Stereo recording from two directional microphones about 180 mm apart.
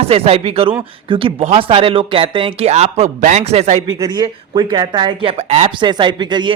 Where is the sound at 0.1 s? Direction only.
35° right (ahead or behind).